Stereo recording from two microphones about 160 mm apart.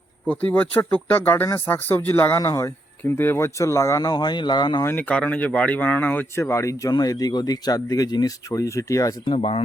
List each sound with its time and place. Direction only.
0.3 s speech: 10° left (ahead or behind); by 4.9 s 25° left (ahead or behind)
4.9 s speech: 10° left (ahead or behind)
9.3 s speech: 35° left (ahead or behind)